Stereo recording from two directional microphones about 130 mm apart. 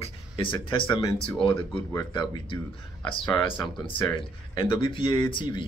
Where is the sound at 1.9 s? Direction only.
30° left (ahead or behind).